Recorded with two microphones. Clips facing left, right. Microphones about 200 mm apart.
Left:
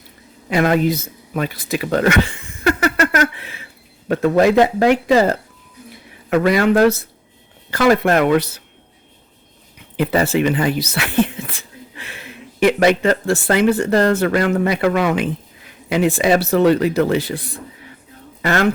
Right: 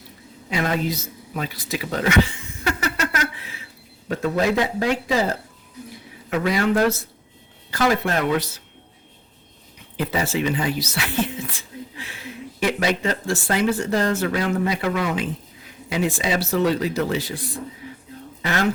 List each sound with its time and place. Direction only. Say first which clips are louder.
0.5 s a sound: left 8 dB; 55° left (ahead or behind)
4.1 s speech: left 7 dB; 65° left (ahead or behind)
6.3 s speech: left 6 dB; 60° left (ahead or behind)
10.0 s speech: left 7 dB; 65° left (ahead or behind)
18.4 s speech: left 5 dB; 60° left (ahead or behind)